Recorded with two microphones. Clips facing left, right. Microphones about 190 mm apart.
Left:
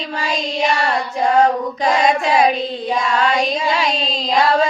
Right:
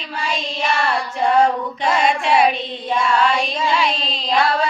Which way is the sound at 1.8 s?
40° left (ahead or behind).